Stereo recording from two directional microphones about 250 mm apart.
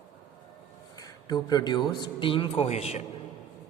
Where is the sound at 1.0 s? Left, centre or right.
Centre.